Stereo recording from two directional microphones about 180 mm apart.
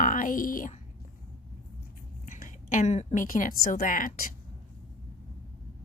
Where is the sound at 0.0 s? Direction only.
50° left (ahead or behind).